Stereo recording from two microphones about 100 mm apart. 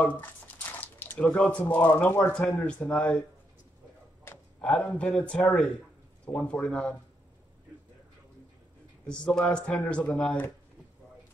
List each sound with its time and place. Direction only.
0.0 s squish: 15° left (ahead or behind)
1.2 s speech: 5° left (ahead or behind)
2.4 s speech: 5° left (ahead or behind)
4.6 s speech: 5° left (ahead or behind)
6.2 s speech: 15° left (ahead or behind)
9.0 s speech: 10° left (ahead or behind)